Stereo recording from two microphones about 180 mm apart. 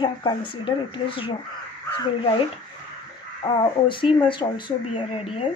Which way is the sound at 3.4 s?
25° left (ahead or behind).